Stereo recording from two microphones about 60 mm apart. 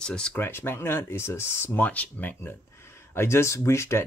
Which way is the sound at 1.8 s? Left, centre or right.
Left.